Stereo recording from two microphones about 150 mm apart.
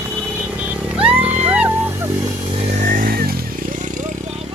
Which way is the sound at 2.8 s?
65° right (ahead or behind).